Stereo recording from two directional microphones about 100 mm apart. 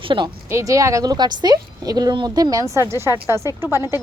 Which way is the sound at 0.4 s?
30° right (ahead or behind).